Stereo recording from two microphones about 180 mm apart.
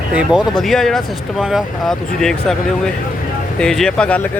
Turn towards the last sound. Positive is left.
turn(degrees=5)  # may be behind; listen again after turning